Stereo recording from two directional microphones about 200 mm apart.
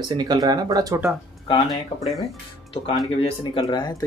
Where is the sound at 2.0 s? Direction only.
Centre (ahead or behind).